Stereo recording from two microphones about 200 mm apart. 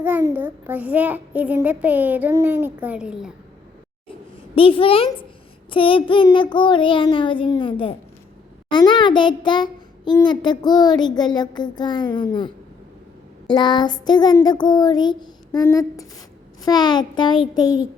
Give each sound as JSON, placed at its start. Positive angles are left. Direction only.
{"t": 0.0, "sound": "a child's voice", "side_deg": -10}
{"t": 4.5, "sound": "a child's voice", "side_deg": 25}
{"t": 13.5, "sound": "a child's voice", "side_deg": 20}